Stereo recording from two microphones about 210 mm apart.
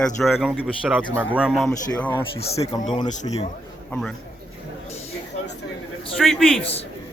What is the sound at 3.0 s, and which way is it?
Speech, 35° left (ahead or behind).